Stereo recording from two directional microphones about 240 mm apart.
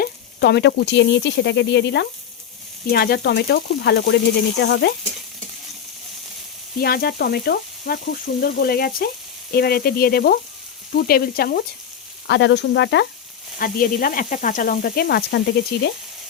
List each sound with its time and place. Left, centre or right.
0.0 s speech: left
6.7 s sizzle: left
12.3 s speech: left
13.6 s sizzle: left
15.7 s speech: left